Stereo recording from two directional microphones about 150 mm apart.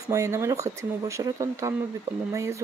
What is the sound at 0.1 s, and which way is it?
Speech, 20° right (ahead or behind).